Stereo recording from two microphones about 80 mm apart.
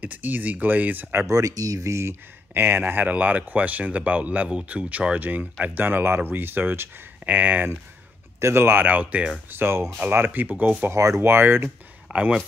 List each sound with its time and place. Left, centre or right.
0.0 s speech: right
1.2 s speech: right
8.4 s speech: right; by 9.3 s centre
9.5 s speech: right
10.9 s speech: right
12.1 s speech: centre